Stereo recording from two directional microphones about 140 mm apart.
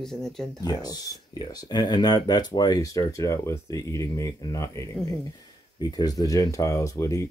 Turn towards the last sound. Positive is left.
turn(degrees=20)  # may be behind; listen again after turning